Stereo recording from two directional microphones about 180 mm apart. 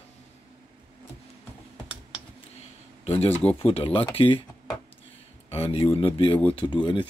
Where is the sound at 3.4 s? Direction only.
30° left (ahead or behind).